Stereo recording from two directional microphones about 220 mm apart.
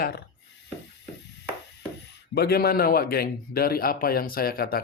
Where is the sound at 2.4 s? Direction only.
45° left (ahead or behind).